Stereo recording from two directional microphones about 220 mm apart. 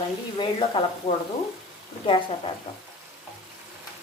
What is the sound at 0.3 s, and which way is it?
Speech, 20° left (ahead or behind).